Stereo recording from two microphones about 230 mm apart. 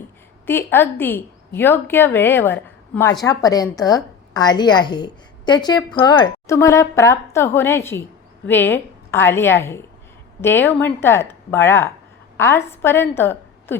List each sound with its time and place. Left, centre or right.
0.4 s a woman's voice: centre